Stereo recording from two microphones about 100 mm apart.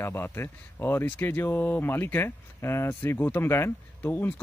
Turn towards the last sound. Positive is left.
turn(degrees=20)  # may be behind; listen again after turning